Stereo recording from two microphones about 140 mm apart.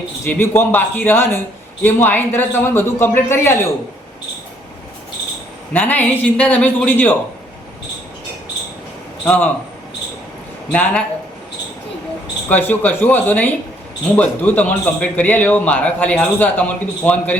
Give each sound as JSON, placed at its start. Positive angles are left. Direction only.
{"t": 0.3, "sound": "a man's voice", "side_deg": 15}
{"t": 5.7, "sound": "a man's voice", "side_deg": 10}
{"t": 9.2, "sound": "a man's voice", "side_deg": 10}
{"t": 10.7, "sound": "a man's voice", "side_deg": 10}
{"t": 12.5, "sound": "a man's voice", "side_deg": 10}